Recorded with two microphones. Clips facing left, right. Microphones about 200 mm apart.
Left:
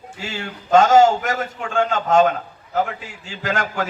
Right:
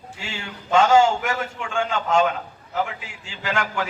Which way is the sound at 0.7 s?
40° left (ahead or behind).